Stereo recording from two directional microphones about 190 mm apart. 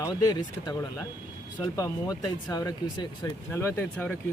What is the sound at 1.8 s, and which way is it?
Speech, 20° left (ahead or behind).